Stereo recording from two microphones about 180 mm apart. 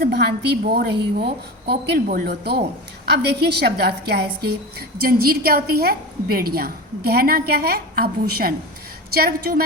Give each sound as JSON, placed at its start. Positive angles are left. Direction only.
{"t": 0.0, "sound": "a woman's voice", "side_deg": -65}